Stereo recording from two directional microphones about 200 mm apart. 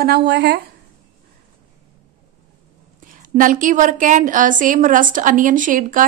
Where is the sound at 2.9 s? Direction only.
40° right (ahead or behind).